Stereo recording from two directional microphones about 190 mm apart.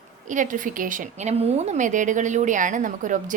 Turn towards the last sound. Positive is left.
turn(degrees=-40)  # may be behind; listen again after turning